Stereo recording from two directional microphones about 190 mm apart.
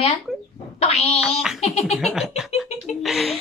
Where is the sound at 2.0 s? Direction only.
Centre (ahead or behind).